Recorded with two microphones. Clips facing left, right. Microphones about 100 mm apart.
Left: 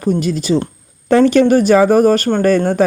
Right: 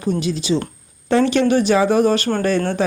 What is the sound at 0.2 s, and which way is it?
Speech, 50° left (ahead or behind).